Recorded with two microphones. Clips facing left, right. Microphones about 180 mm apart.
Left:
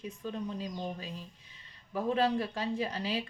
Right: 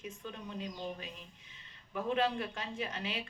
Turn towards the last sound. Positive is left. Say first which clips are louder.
# left 6 dB
turn(degrees=35)  # may be behind; listen again after turning